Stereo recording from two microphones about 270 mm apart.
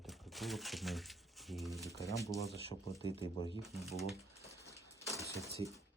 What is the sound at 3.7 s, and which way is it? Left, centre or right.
Speech, centre.